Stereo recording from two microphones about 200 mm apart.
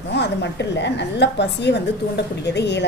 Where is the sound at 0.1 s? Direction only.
60° left (ahead or behind).